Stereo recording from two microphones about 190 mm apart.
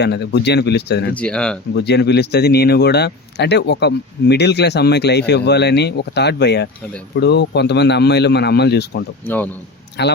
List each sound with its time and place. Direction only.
0.0 s speech: 65° left (ahead or behind)
1.1 s speech: 5° left (ahead or behind)
1.7 s speech: 60° left (ahead or behind)
9.2 s a man's voice: 10° left (ahead or behind)
10.0 s speech: 65° left (ahead or behind)